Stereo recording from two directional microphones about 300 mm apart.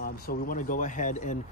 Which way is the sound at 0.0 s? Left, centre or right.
Left.